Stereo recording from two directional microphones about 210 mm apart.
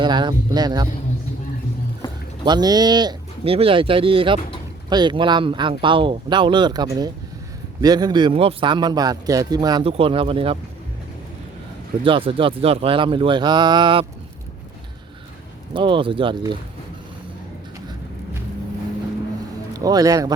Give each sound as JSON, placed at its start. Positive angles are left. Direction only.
{"t": 0.0, "sound": "a sound", "side_deg": -20}
{"t": 2.4, "sound": "a man's voice", "side_deg": -20}
{"t": 12.0, "sound": "a man's voice", "side_deg": -25}
{"t": 15.7, "sound": "a man's voice", "side_deg": -25}
{"t": 19.7, "sound": "a man's voice", "side_deg": -15}